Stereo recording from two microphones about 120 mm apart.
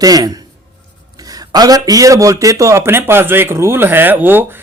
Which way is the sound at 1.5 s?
30° right (ahead or behind).